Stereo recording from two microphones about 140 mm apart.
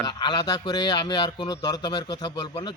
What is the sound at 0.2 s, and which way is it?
A man's voice, 30° left (ahead or behind).